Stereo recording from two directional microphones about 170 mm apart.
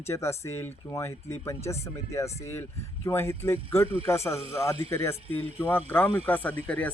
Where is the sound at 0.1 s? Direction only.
15° left (ahead or behind).